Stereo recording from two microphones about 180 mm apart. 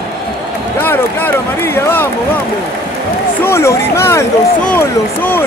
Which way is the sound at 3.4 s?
15° left (ahead or behind).